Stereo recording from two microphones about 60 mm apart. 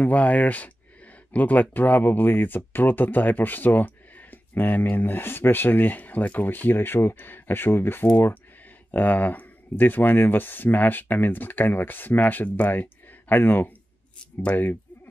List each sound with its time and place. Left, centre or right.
0.0 s speech: left
13.3 s speech: left